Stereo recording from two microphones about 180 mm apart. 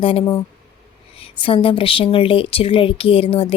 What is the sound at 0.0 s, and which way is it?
Speech, 30° left (ahead or behind).